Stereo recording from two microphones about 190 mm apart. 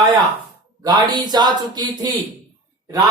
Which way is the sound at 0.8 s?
20° right (ahead or behind).